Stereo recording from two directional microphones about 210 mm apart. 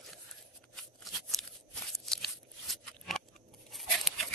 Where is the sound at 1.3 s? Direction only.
Centre (ahead or behind).